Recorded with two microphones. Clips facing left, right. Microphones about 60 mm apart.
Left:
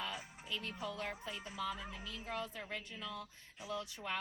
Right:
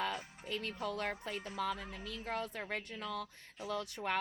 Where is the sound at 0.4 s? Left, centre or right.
Right.